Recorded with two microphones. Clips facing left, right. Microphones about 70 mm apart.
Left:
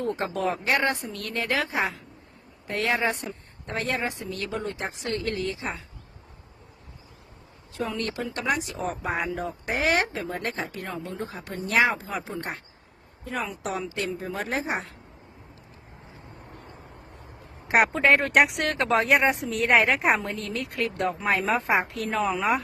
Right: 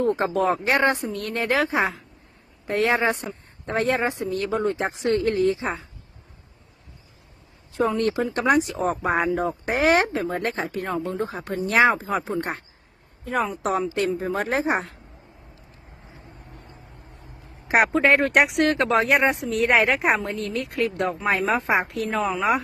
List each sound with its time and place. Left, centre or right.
0.2 s a woman's voice: right
7.9 s speech: right
11.3 s speech: right
14.2 s a woman's voice: right
17.9 s speech: centre